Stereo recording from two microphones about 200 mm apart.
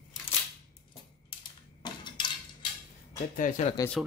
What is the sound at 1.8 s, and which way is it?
Dishes, 20° left (ahead or behind).